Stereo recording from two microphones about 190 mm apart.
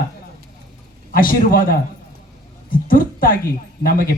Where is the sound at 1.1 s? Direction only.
50° left (ahead or behind).